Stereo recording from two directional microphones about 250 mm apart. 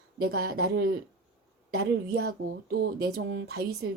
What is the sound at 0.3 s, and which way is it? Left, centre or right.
A woman's voice, right.